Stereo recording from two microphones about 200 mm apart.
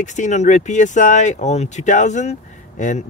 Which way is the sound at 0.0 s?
35° left (ahead or behind).